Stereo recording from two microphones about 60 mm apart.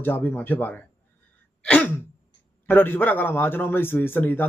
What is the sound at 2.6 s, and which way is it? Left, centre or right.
A man's voice, left.